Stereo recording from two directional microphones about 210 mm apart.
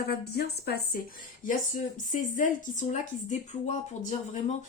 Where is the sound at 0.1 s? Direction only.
50° left (ahead or behind).